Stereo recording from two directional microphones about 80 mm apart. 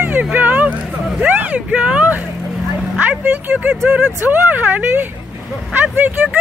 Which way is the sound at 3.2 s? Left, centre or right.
Centre.